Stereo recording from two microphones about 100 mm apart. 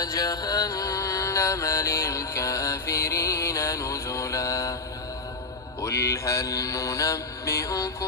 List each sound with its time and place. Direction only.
0.0 s mantra: 40° left (ahead or behind)
5.8 s mantra: 25° left (ahead or behind)